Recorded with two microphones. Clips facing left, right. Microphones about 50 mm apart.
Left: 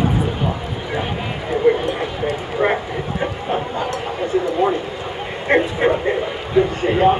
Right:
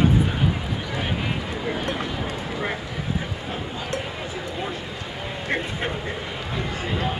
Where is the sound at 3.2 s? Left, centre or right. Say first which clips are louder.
Left 9 dB; left.